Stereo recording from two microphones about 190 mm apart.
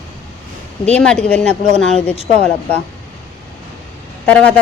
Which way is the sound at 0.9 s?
5° left (ahead or behind).